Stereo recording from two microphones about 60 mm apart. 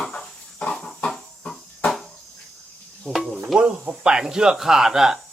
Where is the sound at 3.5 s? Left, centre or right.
Centre.